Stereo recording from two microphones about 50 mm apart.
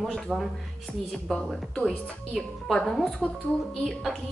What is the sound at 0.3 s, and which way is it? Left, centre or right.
Speech, centre.